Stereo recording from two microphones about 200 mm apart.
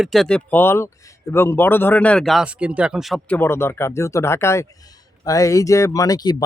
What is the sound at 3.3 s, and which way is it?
Speech, 10° left (ahead or behind).